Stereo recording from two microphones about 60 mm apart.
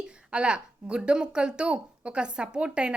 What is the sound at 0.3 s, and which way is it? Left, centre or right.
Speech, centre.